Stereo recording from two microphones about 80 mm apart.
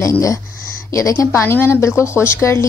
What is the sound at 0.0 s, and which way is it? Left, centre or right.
A woman's voice, left.